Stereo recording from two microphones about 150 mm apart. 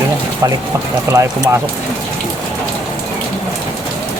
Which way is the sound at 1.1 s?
20° right (ahead or behind).